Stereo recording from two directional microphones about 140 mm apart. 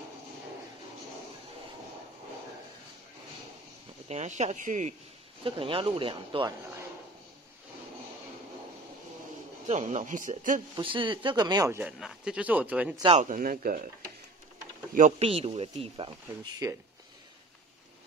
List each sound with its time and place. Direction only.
4.1 s speech: 55° right (ahead or behind)
5.4 s speech: 40° right (ahead or behind)
9.7 s speech: 60° right (ahead or behind)
10.8 s speech: 35° right (ahead or behind)
11.8 s speech: 5° right (ahead or behind)
13.1 s speech: 65° right (ahead or behind); by 13.8 s 80° right
15.0 s speech: 60° right (ahead or behind)
15.2 s speech: 45° right (ahead or behind)
16.6 s speech: 25° right (ahead or behind)